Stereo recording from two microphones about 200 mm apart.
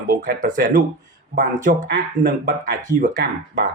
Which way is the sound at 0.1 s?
45° right (ahead or behind).